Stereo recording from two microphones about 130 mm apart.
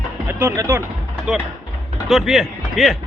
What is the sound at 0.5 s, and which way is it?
Speech, 20° right (ahead or behind).